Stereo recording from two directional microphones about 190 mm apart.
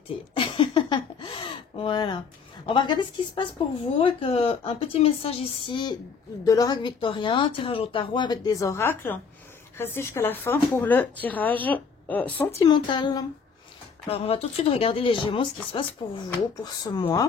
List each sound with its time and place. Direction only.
0.4 s a sound: 25° left (ahead or behind)
4.0 s speech: 30° left (ahead or behind); by 12.4 s 10° left (ahead or behind)
12.5 s speech: 20° left (ahead or behind)